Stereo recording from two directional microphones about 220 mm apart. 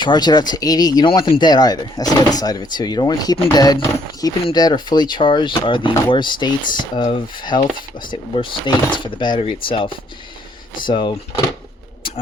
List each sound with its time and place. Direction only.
0.0 s speech: 20° left (ahead or behind)